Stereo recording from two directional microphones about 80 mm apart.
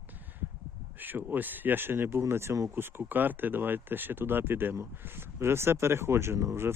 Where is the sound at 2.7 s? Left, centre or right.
Right.